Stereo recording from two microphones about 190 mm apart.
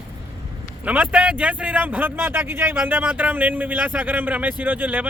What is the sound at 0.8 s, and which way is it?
Speech, 10° right (ahead or behind).